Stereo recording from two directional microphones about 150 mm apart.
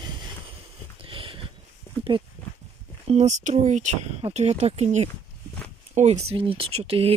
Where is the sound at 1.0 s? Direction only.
35° right (ahead or behind).